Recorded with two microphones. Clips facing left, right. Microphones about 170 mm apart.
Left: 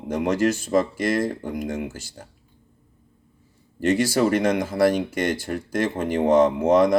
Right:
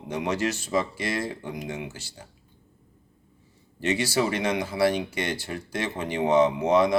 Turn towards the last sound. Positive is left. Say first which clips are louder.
# left 4 dB
turn(degrees=50)  # may be behind; listen again after turning